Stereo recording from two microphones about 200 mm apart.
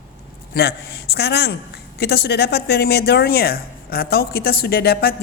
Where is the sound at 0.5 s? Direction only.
55° left (ahead or behind).